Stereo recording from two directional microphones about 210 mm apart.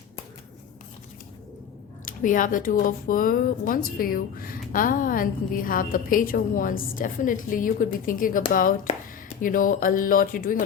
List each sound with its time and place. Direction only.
2.0 s speech: 40° left (ahead or behind)